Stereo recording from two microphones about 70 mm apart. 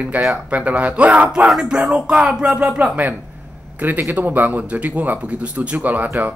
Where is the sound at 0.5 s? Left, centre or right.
Right.